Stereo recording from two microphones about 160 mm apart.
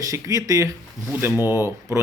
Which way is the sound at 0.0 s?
20° right (ahead or behind).